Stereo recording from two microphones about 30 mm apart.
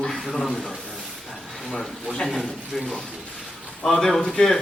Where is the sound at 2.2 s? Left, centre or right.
Centre.